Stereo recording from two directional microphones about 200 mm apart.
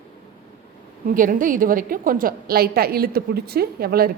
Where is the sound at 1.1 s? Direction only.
40° right (ahead or behind).